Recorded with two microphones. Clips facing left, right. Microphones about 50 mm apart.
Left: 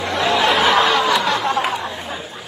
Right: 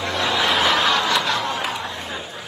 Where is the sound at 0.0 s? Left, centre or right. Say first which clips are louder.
Left 4 dB; centre.